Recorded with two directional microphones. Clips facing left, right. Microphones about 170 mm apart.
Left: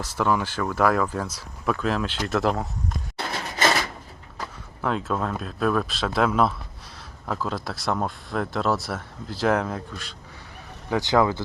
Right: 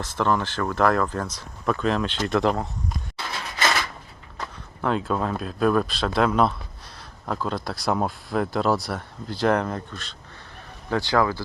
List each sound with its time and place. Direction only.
0.0 s speech: 10° left (ahead or behind)
3.6 s a sound: 30° left (ahead or behind)
4.4 s speech: centre (ahead or behind); by 11.4 s 20° left (ahead or behind)